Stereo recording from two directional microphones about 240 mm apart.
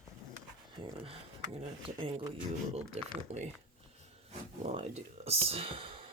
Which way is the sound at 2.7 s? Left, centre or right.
Right.